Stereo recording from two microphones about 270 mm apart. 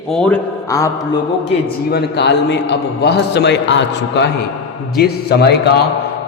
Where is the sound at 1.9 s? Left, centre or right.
Left.